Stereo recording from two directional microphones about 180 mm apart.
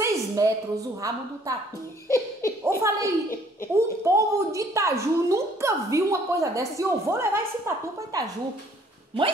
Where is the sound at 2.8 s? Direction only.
15° right (ahead or behind).